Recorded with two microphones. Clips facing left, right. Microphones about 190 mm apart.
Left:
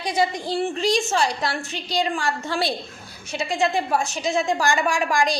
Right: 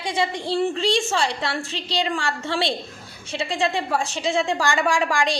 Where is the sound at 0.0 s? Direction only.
30° right (ahead or behind).